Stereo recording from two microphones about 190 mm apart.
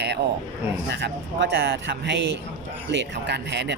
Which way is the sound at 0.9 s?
65° right (ahead or behind).